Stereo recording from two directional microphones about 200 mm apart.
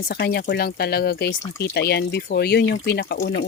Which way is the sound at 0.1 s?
50° left (ahead or behind).